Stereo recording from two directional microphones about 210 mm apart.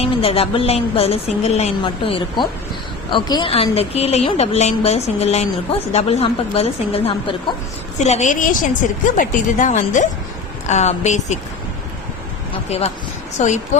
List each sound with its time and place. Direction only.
0.0 s a woman's voice: 25° left (ahead or behind)
13.4 s speech: 35° left (ahead or behind)